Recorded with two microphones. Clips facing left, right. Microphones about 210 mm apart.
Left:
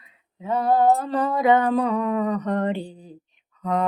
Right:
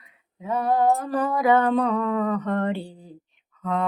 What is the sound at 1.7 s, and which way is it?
Music, 10° left (ahead or behind).